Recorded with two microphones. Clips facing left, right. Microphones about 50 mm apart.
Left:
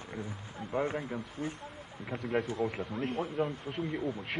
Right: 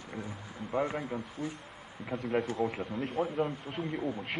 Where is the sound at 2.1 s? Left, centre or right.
Centre.